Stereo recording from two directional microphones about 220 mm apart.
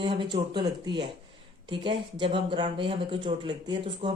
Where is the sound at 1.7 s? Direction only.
25° right (ahead or behind).